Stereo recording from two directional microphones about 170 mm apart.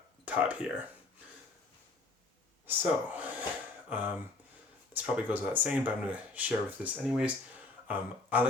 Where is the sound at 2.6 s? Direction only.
10° right (ahead or behind).